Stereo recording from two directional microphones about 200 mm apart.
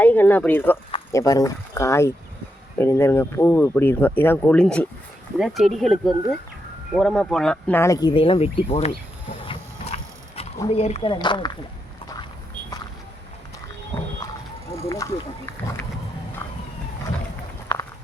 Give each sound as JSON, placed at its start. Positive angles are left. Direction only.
{"t": 0.0, "sound": "speech", "side_deg": 10}
{"t": 9.5, "sound": "a sound", "side_deg": 30}
{"t": 10.7, "sound": "speech", "side_deg": 30}
{"t": 14.8, "sound": "speech", "side_deg": 15}